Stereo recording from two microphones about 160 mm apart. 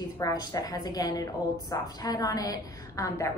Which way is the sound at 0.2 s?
25° left (ahead or behind).